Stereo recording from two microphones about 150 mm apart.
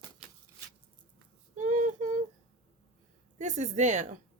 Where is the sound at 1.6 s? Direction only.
55° right (ahead or behind).